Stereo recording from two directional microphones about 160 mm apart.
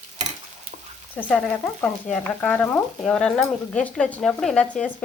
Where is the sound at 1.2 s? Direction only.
10° left (ahead or behind).